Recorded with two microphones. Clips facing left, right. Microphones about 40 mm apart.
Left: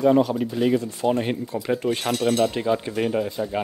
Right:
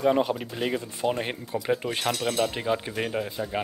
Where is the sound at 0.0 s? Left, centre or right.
Centre.